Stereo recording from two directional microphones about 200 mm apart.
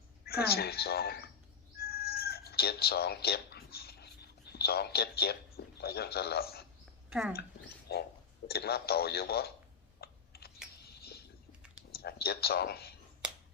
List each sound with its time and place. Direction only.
0.3 s a woman's voice: 50° left (ahead or behind)
1.8 s chicken: 50° left (ahead or behind)
7.1 s speech: 5° right (ahead or behind)
7.9 s a sound: 55° left (ahead or behind)
8.4 s a woman's voice: 50° left (ahead or behind)
10.0 s typing: 50° left (ahead or behind)
10.8 s a sound: 50° left (ahead or behind)
11.9 s speech: 50° left (ahead or behind)